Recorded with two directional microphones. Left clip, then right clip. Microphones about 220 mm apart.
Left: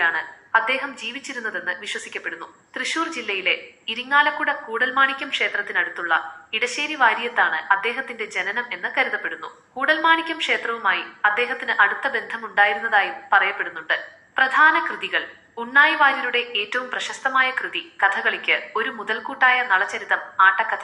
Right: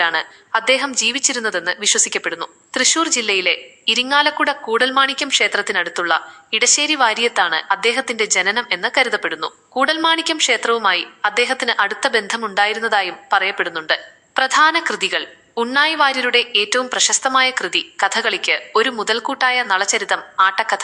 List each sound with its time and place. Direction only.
0.0 s a woman's voice: 55° right (ahead or behind)